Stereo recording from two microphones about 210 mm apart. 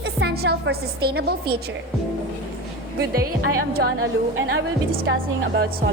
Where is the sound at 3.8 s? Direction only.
60° right (ahead or behind).